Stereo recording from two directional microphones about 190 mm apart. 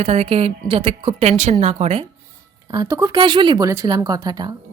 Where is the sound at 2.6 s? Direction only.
20° right (ahead or behind).